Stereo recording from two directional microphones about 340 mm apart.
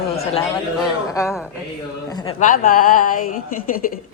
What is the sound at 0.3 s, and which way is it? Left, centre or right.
Speech, centre.